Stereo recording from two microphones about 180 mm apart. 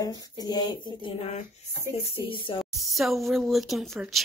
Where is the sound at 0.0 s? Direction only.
20° left (ahead or behind).